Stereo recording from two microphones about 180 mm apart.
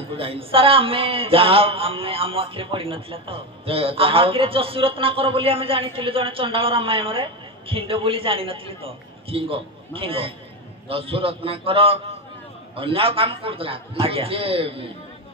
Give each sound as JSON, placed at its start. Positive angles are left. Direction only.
{"t": 0.2, "sound": "speech", "side_deg": -30}